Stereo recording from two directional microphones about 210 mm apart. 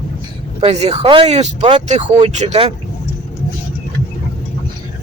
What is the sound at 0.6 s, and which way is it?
Speech, 30° right (ahead or behind).